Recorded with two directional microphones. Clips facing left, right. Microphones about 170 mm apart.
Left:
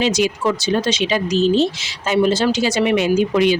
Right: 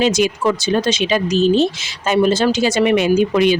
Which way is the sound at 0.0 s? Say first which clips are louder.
Right 2 dB; 50° right (ahead or behind).